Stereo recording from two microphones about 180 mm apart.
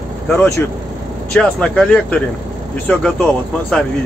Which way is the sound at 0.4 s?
15° left (ahead or behind).